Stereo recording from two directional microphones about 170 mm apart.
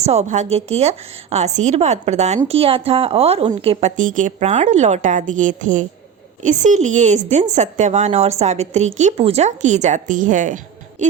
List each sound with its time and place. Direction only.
0.0 s a woman's voice: 40° right (ahead or behind)